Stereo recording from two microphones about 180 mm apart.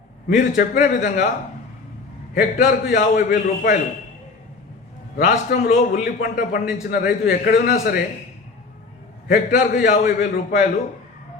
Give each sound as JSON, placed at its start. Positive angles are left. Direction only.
{"t": 0.5, "sound": "a man's voice", "side_deg": 45}
{"t": 2.3, "sound": "a man's voice", "side_deg": 45}
{"t": 5.1, "sound": "a man's voice", "side_deg": 50}
{"t": 9.2, "sound": "a man's voice", "side_deg": 45}